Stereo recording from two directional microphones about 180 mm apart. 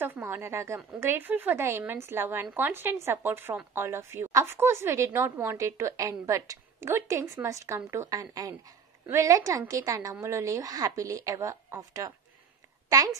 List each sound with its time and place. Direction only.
0.0 s a woman's voice: 15° right (ahead or behind)